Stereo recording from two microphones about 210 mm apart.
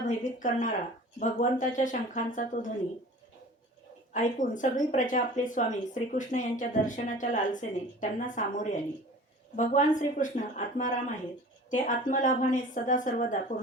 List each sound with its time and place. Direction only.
0.3 s speech: 40° left (ahead or behind)
4.1 s speech: 40° left (ahead or behind)